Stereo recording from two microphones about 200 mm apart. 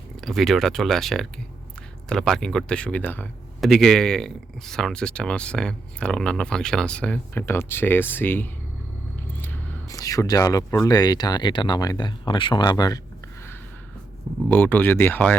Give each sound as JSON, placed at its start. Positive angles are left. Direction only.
{"t": 0.2, "sound": "speech", "side_deg": 0}
{"t": 14.5, "sound": "speech", "side_deg": 10}